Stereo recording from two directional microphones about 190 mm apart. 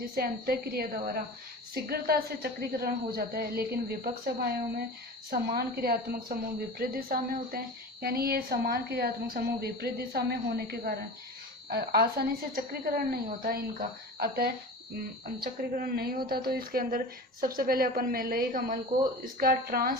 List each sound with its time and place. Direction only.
0.0 s a woman's voice: 50° right (ahead or behind)
15.7 s a woman's voice: 50° right (ahead or behind)